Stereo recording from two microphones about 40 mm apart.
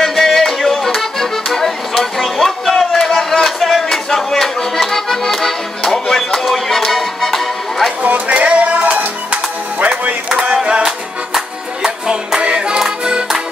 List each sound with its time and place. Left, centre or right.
0.0 s music: centre
8.0 s music: right
12.4 s music: right